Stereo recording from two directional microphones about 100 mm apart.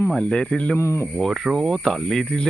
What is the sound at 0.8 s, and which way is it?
Speech, 25° left (ahead or behind).